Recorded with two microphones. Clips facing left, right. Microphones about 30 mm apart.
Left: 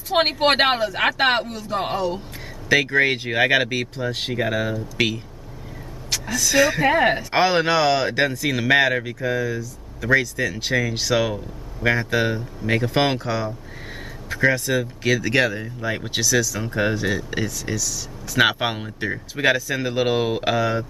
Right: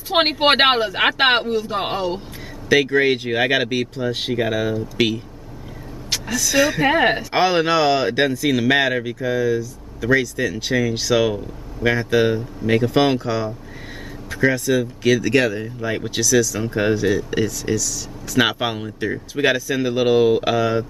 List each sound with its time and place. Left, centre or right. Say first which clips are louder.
0.1 s speech: right 2 dB; right
2.7 s speech: right 2 dB; centre
6.2 s speech: even; centre
6.8 s speech: right 1 dB; centre
7.2 s speech: right 1 dB; centre
16.5 s speech: right 2 dB; centre
17.0 s speech: right 5 dB; centre